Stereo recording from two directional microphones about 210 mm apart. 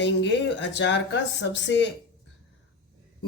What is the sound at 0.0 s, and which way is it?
Speech, 60° left (ahead or behind).